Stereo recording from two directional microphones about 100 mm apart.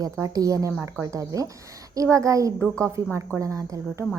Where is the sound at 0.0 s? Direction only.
35° right (ahead or behind).